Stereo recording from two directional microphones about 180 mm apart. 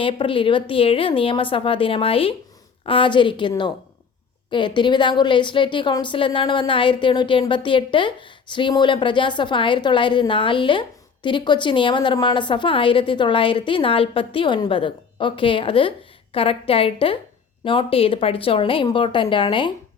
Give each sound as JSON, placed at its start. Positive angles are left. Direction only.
{"t": 0.0, "sound": "a woman's voice", "side_deg": 30}